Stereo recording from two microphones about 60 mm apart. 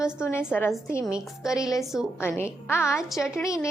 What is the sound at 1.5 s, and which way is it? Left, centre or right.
Speech, left.